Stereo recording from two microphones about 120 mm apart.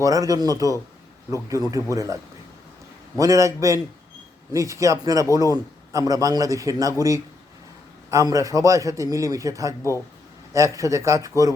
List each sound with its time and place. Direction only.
0.0 s a man's voice: 30° right (ahead or behind)
3.2 s a man's voice: 30° right (ahead or behind)
8.1 s a man's voice: 30° right (ahead or behind)